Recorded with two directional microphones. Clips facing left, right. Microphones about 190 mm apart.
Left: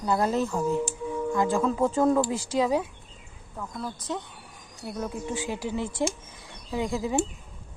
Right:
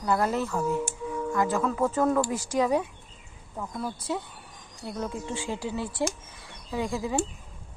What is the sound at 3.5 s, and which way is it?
Speech, 10° right (ahead or behind).